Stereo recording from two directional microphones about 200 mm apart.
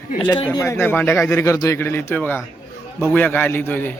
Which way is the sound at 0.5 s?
15° left (ahead or behind).